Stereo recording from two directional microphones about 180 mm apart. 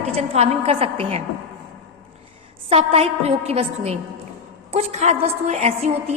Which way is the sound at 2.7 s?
30° right (ahead or behind).